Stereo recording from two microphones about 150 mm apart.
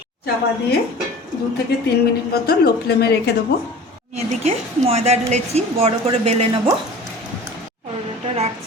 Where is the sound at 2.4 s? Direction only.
90° left.